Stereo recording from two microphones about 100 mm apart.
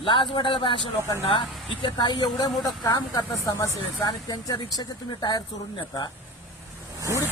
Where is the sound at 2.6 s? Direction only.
35° left (ahead or behind).